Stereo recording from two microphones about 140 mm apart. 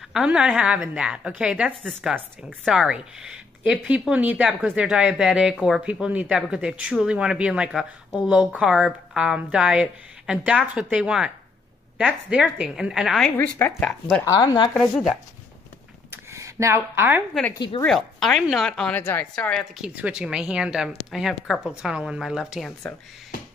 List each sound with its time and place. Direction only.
0.1 s a woman's voice: 5° right (ahead or behind)
13.2 s a woman's voice: 10° left (ahead or behind)
14.2 s speech: 25° left (ahead or behind)
16.1 s a sound: 20° right (ahead or behind)
17.3 s speech: 10° left (ahead or behind)
17.6 s speech: 30° left (ahead or behind)
17.8 s a woman's voice: centre (ahead or behind)
19.9 s a woman's voice: 10° right (ahead or behind)